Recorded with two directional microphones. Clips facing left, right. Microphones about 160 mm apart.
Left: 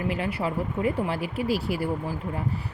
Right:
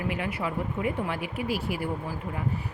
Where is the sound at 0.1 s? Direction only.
30° left (ahead or behind).